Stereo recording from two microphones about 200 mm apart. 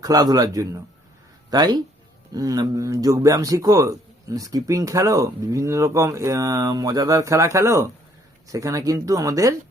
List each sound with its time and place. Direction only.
0.0 s a man's voice: 20° right (ahead or behind)